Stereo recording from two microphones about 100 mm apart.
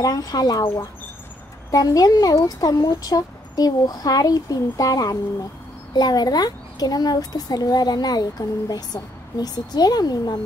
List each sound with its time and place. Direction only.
0.0 s speech: 40° left (ahead or behind)
1.7 s speech: 40° left (ahead or behind)